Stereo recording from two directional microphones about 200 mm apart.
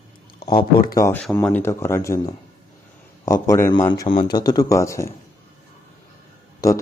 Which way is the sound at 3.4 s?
15° left (ahead or behind).